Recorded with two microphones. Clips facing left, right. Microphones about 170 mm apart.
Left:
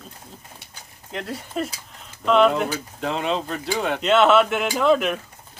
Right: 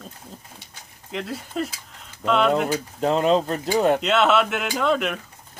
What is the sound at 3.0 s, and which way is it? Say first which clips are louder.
Speech: right 6 dB; 40° right (ahead or behind).